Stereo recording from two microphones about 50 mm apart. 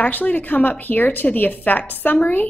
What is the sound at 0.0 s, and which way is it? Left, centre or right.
A woman's voice, left.